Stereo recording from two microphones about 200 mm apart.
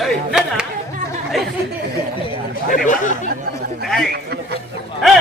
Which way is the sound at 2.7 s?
40° left (ahead or behind).